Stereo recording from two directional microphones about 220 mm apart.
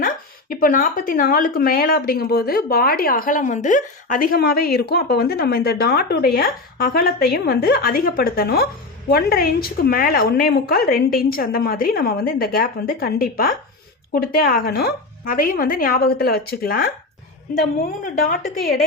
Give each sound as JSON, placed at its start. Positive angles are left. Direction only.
{"t": 0.0, "sound": "a woman's voice", "side_deg": 40}